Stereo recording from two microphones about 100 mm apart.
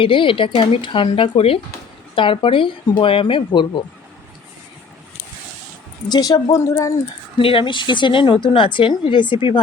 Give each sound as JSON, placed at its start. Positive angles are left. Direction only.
{"t": 0.0, "sound": "speech", "side_deg": 60}
{"t": 2.1, "sound": "speech", "side_deg": 60}
{"t": 6.1, "sound": "a woman's voice", "side_deg": 45}
{"t": 7.3, "sound": "a woman's voice", "side_deg": 60}